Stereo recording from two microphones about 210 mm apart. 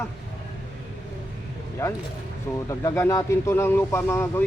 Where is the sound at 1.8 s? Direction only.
15° left (ahead or behind).